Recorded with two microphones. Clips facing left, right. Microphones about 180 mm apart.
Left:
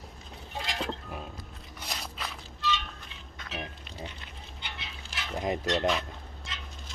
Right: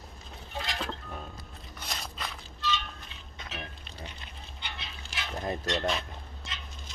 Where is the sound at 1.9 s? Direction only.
5° left (ahead or behind).